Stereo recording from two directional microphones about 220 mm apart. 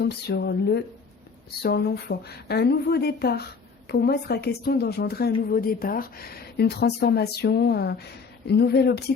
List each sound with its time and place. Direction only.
0.0 s speech: 50° left (ahead or behind)